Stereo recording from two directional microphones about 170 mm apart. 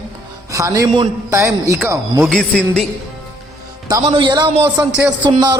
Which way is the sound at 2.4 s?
5° left (ahead or behind).